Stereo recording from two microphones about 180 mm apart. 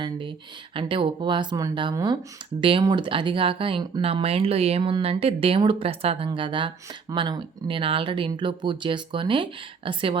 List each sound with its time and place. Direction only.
0.0 s speech: 25° right (ahead or behind)